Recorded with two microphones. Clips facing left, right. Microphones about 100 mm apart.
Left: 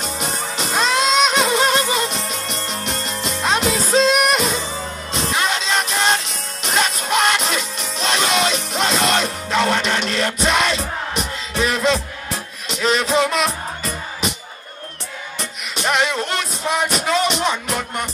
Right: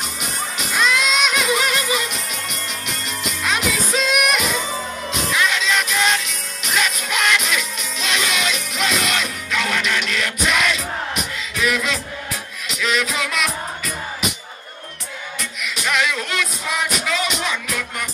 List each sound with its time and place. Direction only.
0.0 s music: 30° left (ahead or behind)
15.6 s music: 35° left (ahead or behind)